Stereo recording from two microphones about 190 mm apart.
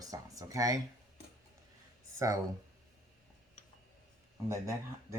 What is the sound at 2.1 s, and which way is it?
Speech, 15° right (ahead or behind).